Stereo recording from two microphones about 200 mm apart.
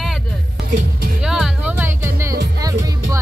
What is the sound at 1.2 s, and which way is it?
Music, 5° right (ahead or behind).